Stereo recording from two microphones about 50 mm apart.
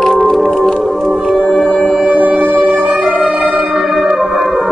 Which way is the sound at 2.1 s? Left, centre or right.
Right.